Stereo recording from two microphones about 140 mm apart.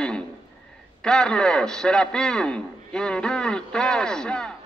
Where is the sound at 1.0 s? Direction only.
5° left (ahead or behind).